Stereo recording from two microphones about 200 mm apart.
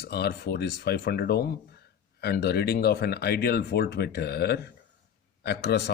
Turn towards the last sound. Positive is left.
turn(degrees=55)  # may be behind; listen again after turning